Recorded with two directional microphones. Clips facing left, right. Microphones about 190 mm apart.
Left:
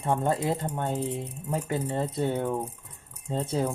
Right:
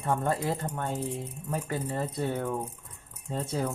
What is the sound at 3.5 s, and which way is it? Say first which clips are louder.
Speech: left 3 dB; 25° left (ahead or behind).